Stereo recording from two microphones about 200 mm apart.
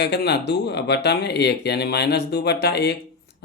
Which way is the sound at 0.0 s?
55° left (ahead or behind).